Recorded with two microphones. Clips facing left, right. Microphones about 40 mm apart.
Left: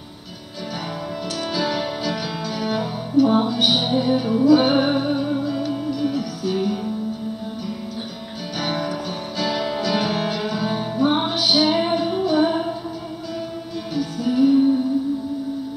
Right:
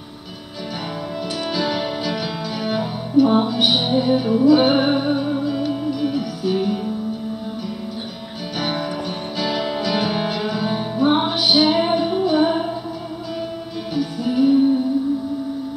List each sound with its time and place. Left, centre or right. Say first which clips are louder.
1.5 s music: right 1 dB; centre
8.5 s music: right 1 dB; centre
13.9 s music: even; centre